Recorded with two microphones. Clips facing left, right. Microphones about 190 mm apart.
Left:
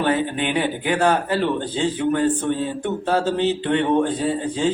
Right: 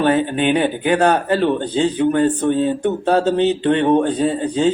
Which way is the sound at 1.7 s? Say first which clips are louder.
Right 5 dB; 40° right (ahead or behind).